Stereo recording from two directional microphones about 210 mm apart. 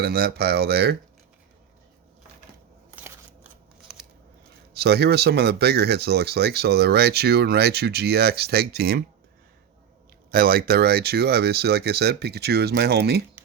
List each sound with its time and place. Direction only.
0.0 s speech: 50° right (ahead or behind)
4.7 s speech: 50° right (ahead or behind)
10.3 s speech: 45° right (ahead or behind)